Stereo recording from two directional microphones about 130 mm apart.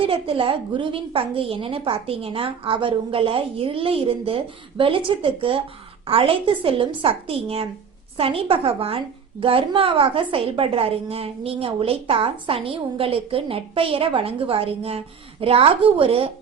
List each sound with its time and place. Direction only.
0.0 s a woman's voice: 45° right (ahead or behind)